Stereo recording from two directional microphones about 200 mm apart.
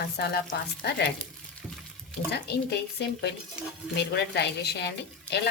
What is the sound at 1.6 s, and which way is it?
Water, 5° right (ahead or behind).